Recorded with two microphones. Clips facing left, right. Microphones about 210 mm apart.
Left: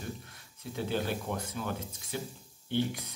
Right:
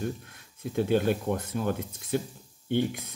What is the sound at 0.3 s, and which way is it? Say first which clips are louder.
Speech: right 7 dB; 55° right (ahead or behind).